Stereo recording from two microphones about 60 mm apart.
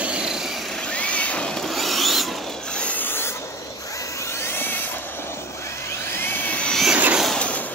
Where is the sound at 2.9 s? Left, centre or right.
Left.